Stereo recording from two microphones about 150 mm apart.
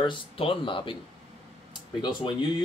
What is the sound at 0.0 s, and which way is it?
Speech, 35° left (ahead or behind).